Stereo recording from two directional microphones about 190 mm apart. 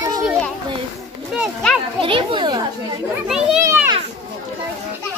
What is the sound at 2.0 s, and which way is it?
Speech, 25° right (ahead or behind).